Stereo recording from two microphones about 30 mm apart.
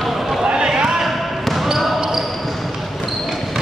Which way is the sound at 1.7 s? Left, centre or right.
Centre.